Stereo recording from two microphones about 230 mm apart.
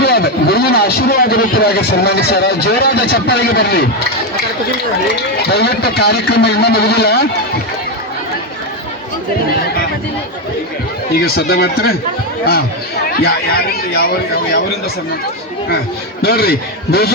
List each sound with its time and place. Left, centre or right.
0.0 s a man's voice: left
5.5 s speech: left
11.1 s speech: left
13.9 s speech: left
16.2 s speech: left